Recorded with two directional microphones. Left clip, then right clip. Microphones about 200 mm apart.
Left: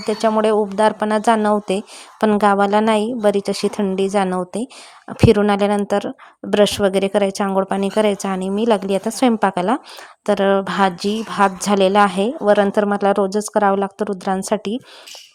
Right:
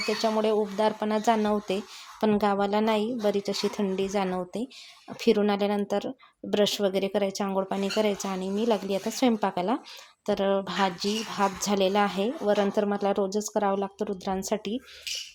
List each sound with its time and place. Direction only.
0.2 s speech: 35° left (ahead or behind)